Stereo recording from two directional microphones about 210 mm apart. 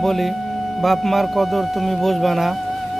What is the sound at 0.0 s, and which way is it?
Speech, centre (ahead or behind).